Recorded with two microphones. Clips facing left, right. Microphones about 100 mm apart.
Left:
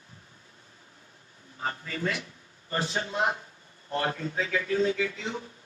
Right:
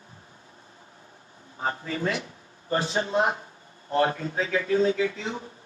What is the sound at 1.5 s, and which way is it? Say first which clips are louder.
Speech: right 4 dB; 35° right (ahead or behind).